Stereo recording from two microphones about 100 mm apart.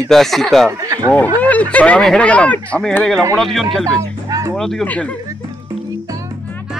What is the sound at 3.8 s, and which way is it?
Music, 35° right (ahead or behind).